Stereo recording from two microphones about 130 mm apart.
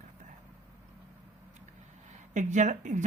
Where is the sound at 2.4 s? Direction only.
70° right (ahead or behind).